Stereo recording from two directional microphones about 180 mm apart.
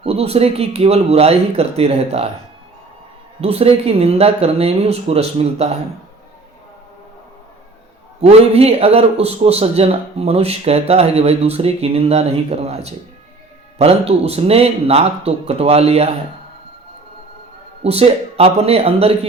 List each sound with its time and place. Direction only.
0.0 s speech: 35° right (ahead or behind)
3.4 s speech: 35° right (ahead or behind)
8.2 s speech: 35° right (ahead or behind)
17.8 s speech: 35° right (ahead or behind)